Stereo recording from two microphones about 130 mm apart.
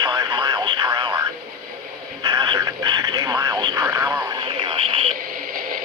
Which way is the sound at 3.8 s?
20° right (ahead or behind).